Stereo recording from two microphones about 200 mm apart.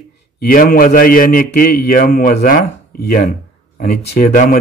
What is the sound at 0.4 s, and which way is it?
A man's voice, 45° left (ahead or behind).